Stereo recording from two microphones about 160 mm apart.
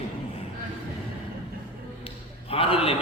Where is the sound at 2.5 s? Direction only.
35° left (ahead or behind).